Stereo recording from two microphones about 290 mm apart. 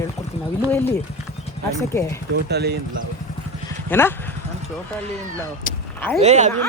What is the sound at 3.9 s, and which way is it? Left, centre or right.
Speech, centre.